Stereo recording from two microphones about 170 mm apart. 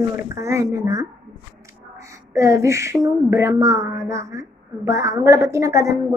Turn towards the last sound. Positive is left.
turn(degrees=-20)  # may be behind; listen again after turning